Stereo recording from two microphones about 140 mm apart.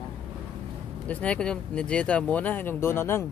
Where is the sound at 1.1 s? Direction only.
10° left (ahead or behind).